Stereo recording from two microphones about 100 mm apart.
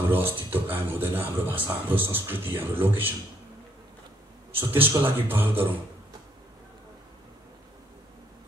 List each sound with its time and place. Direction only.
0.0 s a man's voice: 20° right (ahead or behind)
4.6 s a man's voice: 20° right (ahead or behind)